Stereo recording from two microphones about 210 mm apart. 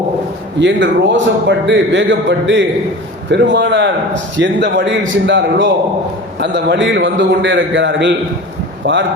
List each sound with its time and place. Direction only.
0.6 s a man's voice: 60° right (ahead or behind)